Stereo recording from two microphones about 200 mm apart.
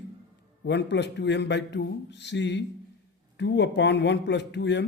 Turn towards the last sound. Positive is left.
turn(degrees=60)  # may be behind; listen again after turning